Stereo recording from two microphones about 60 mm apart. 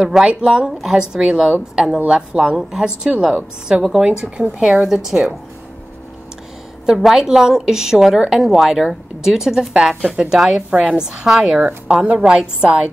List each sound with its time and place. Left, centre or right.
0.0 s a woman's voice: centre
6.9 s a woman's voice: centre
11.6 s a woman's voice: right